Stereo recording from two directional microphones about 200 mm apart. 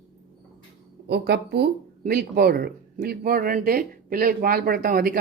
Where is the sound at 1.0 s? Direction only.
55° right (ahead or behind).